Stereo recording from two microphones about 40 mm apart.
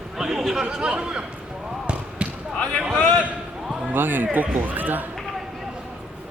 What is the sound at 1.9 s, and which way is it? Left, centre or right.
Basketball bounce, right.